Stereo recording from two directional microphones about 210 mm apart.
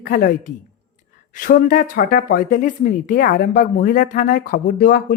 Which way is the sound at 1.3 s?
40° left (ahead or behind).